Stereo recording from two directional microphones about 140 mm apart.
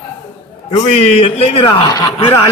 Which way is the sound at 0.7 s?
50° left (ahead or behind).